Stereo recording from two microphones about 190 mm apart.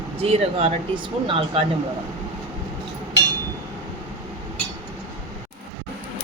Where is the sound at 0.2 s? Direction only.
30° right (ahead or behind).